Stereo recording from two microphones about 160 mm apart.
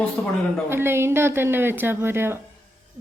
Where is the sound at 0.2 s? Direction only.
15° left (ahead or behind).